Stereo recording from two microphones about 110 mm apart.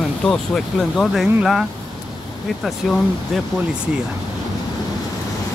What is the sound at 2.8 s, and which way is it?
Speech, centre (ahead or behind).